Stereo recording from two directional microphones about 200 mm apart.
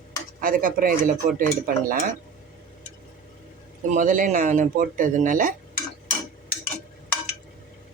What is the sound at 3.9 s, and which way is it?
Speech, 40° right (ahead or behind).